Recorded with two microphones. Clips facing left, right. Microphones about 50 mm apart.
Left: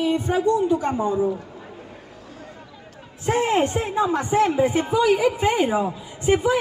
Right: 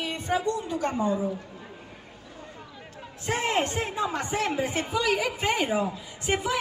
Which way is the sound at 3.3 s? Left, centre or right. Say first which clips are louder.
Left 6 dB; centre.